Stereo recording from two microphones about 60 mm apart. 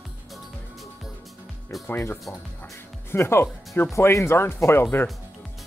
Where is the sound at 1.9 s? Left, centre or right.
Left.